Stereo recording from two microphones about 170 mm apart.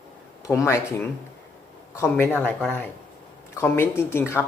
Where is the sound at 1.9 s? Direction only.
15° left (ahead or behind).